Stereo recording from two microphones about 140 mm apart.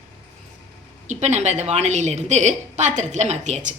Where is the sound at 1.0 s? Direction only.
55° right (ahead or behind).